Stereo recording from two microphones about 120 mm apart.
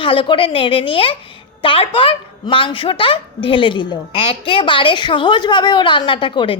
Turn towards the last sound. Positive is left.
turn(degrees=45)  # may be behind; listen again after turning